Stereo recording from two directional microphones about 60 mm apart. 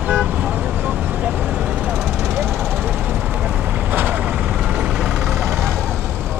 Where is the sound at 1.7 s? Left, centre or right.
Centre.